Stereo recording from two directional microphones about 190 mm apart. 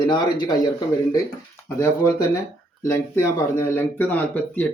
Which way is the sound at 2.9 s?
15° left (ahead or behind).